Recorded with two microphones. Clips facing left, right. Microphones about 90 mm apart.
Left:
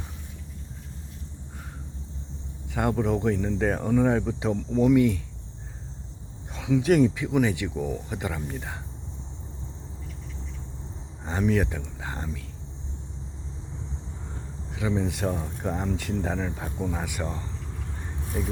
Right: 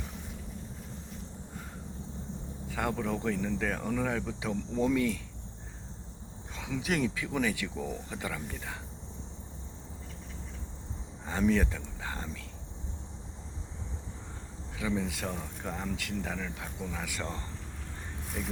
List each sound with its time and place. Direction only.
2.7 s speech: 20° left (ahead or behind)
6.5 s a sound: 10° left (ahead or behind)
6.8 s speech: 25° left (ahead or behind)
7.8 s speech: 10° left (ahead or behind)
8.1 s speech: 20° left (ahead or behind)
11.4 s speech: 10° left (ahead or behind)
14.8 s speech: 25° left (ahead or behind)
17.2 s speech: 5° left (ahead or behind)